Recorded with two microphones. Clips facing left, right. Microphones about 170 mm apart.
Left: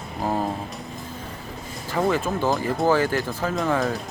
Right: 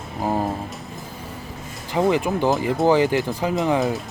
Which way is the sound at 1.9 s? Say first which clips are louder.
Right 3 dB; 15° right (ahead or behind).